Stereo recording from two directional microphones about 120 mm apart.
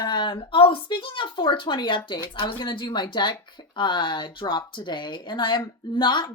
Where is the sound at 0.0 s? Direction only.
40° left (ahead or behind).